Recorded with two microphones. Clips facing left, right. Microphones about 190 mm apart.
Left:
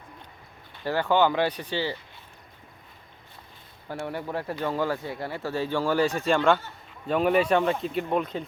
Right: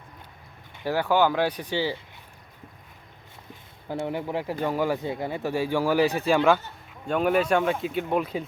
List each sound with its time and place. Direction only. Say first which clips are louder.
0.8 s speech: even; 10° right (ahead or behind)
3.8 s speech: right 3 dB; 15° right (ahead or behind)
6.2 s speech: right 1 dB; centre (ahead or behind)